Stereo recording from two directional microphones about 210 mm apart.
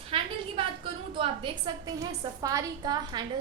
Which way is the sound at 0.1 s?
25° right (ahead or behind).